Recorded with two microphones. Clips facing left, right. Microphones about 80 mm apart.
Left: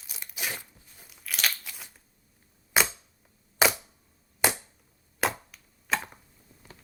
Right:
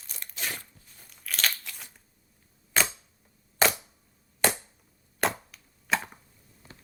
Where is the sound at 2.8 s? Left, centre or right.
Centre.